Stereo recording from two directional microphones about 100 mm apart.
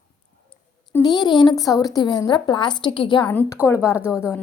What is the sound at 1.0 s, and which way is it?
Speech, 45° left (ahead or behind).